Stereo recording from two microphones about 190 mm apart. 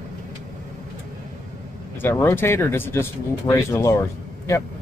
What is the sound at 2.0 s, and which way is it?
Speech, 15° left (ahead or behind).